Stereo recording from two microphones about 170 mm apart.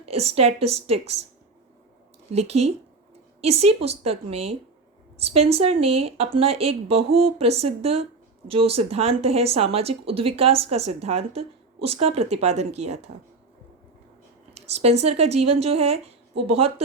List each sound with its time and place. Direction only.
0.0 s speech: 35° right (ahead or behind)
2.3 s speech: 40° right (ahead or behind)
14.5 s speech: 40° right (ahead or behind)